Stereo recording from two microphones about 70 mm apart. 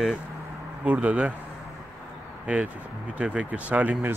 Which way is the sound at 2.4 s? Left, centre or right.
Centre.